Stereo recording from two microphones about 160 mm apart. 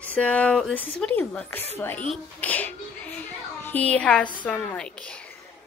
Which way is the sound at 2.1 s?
10° left (ahead or behind).